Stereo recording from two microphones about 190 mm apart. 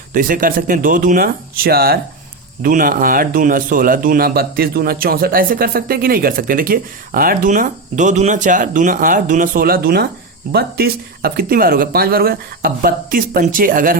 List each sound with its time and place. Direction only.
0.1 s speech: 45° right (ahead or behind)